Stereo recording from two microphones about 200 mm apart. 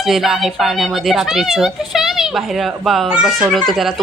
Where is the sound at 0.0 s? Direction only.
Centre (ahead or behind).